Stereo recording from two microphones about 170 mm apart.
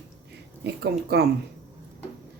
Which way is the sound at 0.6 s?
70° right (ahead or behind).